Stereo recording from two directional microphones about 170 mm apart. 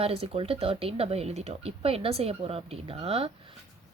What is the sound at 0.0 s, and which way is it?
Speech, 35° right (ahead or behind).